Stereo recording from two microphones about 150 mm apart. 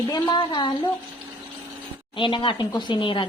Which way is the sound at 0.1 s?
30° left (ahead or behind).